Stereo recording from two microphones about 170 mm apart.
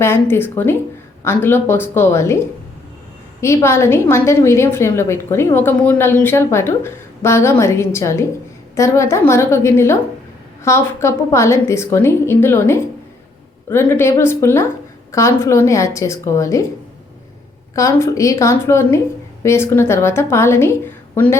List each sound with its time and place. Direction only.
0.0 s a woman's voice: 15° left (ahead or behind)
3.4 s a woman's voice: 15° left (ahead or behind)
17.7 s a woman's voice: 20° left (ahead or behind)